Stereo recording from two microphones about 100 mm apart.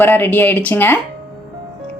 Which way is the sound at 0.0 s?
20° left (ahead or behind).